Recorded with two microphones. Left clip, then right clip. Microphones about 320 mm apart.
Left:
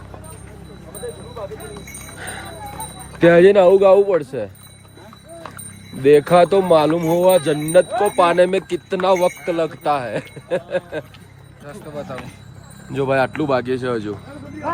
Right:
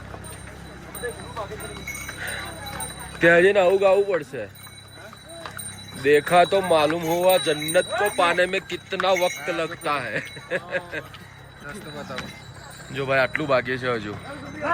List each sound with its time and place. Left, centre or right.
3.2 s speech: centre
6.0 s speech: centre
11.7 s speech: left
12.9 s speech: centre